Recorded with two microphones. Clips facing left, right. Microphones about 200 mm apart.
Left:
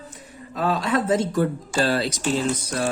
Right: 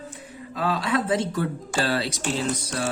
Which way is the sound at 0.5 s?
45° left (ahead or behind).